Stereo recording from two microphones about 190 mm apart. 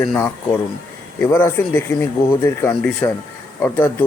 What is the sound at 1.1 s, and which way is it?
Speech, 10° left (ahead or behind).